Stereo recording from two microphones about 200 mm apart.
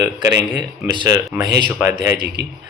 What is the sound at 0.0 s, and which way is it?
Speech, 15° right (ahead or behind).